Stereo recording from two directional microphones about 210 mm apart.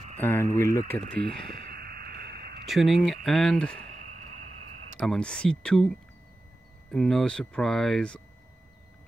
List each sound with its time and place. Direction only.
0.2 s speech: 10° left (ahead or behind)
1.5 s a sound: 50° right (ahead or behind)
2.6 s speech: centre (ahead or behind)
4.9 s speech: centre (ahead or behind)